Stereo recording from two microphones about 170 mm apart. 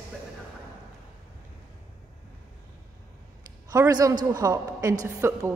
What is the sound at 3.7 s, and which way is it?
A man's voice, 20° right (ahead or behind).